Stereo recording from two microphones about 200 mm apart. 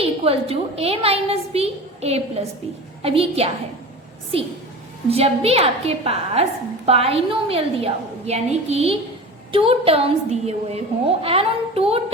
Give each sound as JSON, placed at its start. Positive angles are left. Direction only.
{"t": 0.0, "sound": "a woman's voice", "side_deg": -30}